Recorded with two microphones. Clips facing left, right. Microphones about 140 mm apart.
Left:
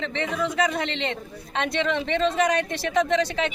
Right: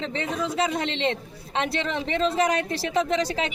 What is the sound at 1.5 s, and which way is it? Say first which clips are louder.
Speech: left 2 dB; 30° right (ahead or behind).